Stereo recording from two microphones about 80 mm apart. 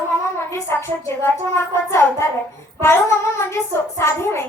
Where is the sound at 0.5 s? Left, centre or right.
Left.